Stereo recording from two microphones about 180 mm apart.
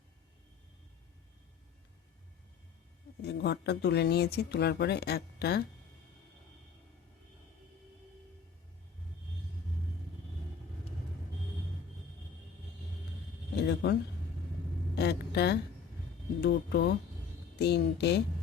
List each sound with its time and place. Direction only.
3.2 s speech: 65° left (ahead or behind)
13.6 s a sound: 65° left (ahead or behind)
14.9 s a woman's voice: 65° left (ahead or behind)